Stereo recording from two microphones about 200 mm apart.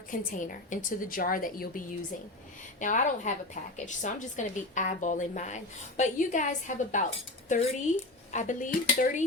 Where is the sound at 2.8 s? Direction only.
40° left (ahead or behind).